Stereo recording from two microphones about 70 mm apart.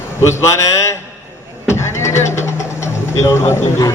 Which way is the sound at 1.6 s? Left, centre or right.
Left.